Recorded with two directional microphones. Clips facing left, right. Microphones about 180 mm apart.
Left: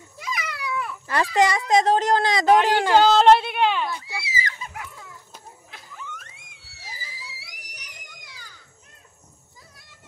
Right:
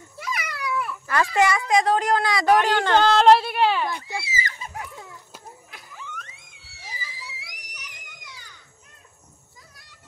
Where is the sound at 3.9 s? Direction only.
45° right (ahead or behind).